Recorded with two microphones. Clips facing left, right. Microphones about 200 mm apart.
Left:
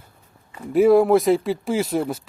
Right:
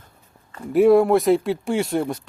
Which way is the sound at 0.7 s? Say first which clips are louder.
Even; centre (ahead or behind).